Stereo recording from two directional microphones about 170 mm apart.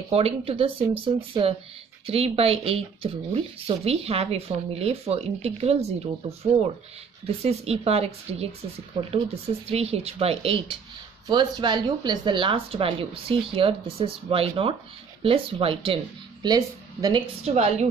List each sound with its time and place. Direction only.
0.1 s speech: 35° right (ahead or behind)
17.5 s speech: 40° right (ahead or behind)